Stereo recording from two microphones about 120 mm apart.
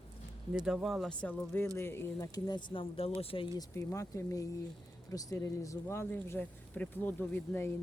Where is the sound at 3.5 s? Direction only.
25° left (ahead or behind).